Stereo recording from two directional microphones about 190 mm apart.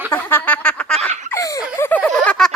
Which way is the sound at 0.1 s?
10° left (ahead or behind).